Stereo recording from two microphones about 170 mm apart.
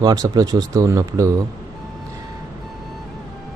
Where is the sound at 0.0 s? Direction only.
20° right (ahead or behind).